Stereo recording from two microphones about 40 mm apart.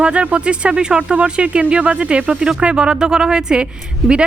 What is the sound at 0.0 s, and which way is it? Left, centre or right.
Speech, right.